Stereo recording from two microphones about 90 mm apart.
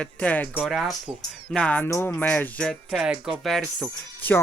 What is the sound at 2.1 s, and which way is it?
Speech, 20° left (ahead or behind).